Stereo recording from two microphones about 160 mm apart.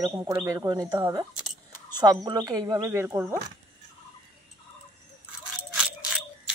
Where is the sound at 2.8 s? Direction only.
15° right (ahead or behind).